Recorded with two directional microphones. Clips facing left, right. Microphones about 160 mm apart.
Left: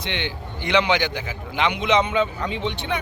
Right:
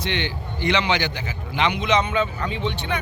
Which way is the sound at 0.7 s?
15° left (ahead or behind).